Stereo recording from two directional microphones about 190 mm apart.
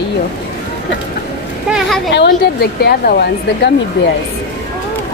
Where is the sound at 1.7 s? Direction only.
Centre (ahead or behind).